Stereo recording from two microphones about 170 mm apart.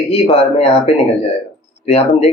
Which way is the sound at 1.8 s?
35° left (ahead or behind).